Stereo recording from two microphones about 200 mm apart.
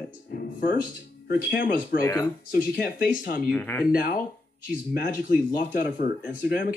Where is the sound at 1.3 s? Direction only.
50° left (ahead or behind).